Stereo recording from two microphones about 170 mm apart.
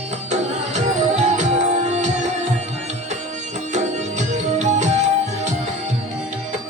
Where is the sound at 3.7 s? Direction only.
45° right (ahead or behind).